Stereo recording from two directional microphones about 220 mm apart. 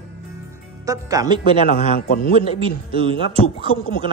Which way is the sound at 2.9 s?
25° right (ahead or behind).